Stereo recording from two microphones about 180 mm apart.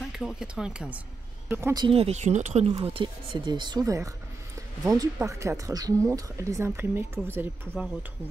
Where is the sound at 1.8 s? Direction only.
35° right (ahead or behind).